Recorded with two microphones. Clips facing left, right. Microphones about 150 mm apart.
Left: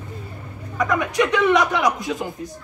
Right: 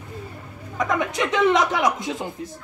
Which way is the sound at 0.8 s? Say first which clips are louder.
Left 3 dB; 25° right (ahead or behind).